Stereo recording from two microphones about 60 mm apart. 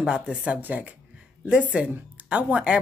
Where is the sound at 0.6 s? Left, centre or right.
Right.